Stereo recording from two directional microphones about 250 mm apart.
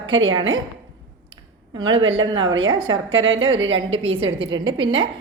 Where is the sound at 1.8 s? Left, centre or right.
Right.